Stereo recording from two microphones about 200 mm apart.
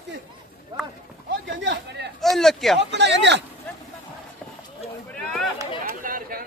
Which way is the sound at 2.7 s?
60° right (ahead or behind).